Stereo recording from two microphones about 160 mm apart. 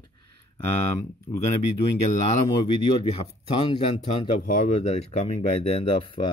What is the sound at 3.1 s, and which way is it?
Speech, 35° left (ahead or behind).